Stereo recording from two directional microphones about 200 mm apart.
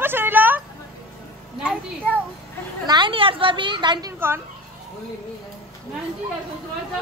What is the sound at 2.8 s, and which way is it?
A woman's voice, 20° right (ahead or behind).